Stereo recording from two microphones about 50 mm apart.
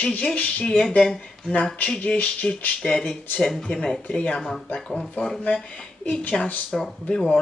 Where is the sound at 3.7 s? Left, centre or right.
Centre; by 6.1 s left.